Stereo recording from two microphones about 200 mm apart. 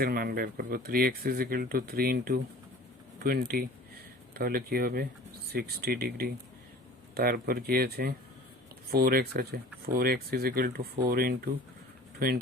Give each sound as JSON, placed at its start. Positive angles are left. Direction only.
{"t": 0.0, "sound": "speech", "side_deg": -50}
{"t": 3.5, "sound": "speech", "side_deg": -45}